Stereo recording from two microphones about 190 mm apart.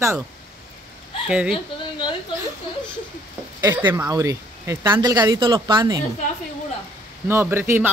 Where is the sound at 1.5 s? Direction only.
25° left (ahead or behind).